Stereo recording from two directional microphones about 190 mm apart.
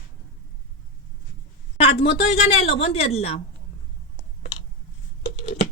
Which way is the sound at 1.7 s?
30° left (ahead or behind).